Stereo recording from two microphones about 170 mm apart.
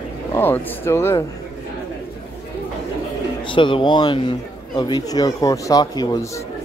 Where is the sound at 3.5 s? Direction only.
30° left (ahead or behind).